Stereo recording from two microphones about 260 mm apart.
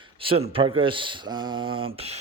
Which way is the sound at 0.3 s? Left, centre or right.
Right.